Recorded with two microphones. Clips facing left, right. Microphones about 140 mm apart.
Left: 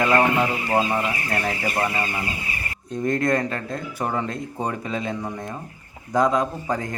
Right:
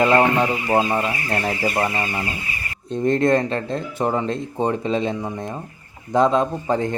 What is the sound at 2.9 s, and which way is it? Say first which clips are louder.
Speech: right 4 dB; 25° right (ahead or behind).